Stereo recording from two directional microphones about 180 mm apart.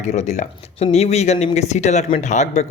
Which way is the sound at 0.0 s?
40° left (ahead or behind).